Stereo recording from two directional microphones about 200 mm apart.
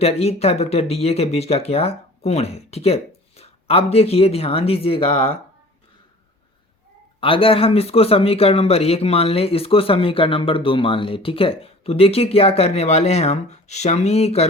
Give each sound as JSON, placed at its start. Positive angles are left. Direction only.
{"t": 0.0, "sound": "speech", "side_deg": 30}
{"t": 7.2, "sound": "speech", "side_deg": 25}